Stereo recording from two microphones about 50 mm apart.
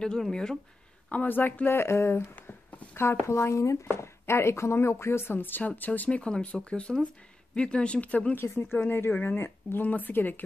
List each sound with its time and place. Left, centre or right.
0.0 s speech: centre
1.1 s speech: left
3.9 s speech: left
8.7 s speech: left